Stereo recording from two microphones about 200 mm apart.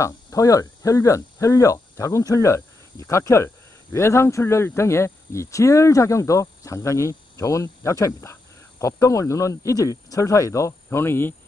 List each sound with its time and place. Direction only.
0.0 s speech: 15° left (ahead or behind)